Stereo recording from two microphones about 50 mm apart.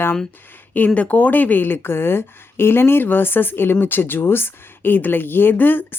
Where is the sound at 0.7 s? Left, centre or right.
Left.